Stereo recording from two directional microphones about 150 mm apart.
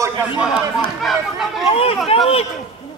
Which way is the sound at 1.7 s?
40° left (ahead or behind).